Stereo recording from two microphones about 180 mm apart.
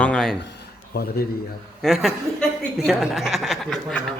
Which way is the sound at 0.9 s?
60° left (ahead or behind).